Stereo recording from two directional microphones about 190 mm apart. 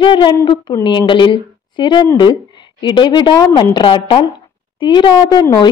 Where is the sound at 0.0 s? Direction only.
25° left (ahead or behind).